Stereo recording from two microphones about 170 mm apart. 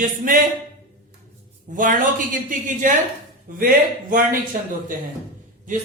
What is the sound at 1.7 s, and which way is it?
A man's voice, 50° right (ahead or behind).